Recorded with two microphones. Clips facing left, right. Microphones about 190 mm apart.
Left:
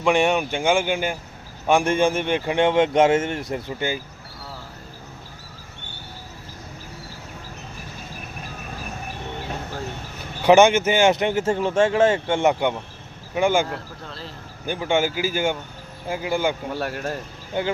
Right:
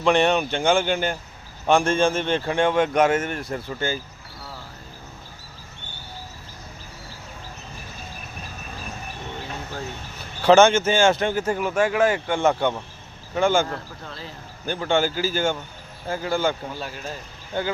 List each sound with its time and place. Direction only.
0.0 s speech: 10° left (ahead or behind)
10.4 s speech: 15° left (ahead or behind)
16.7 s speech: 65° left (ahead or behind)
17.5 s speech: 15° left (ahead or behind)